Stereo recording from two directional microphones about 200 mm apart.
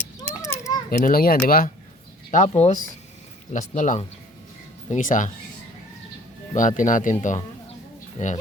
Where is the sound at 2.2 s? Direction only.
35° left (ahead or behind).